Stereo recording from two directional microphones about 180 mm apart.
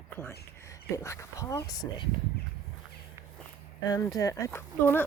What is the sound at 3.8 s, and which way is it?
Speech, 20° left (ahead or behind).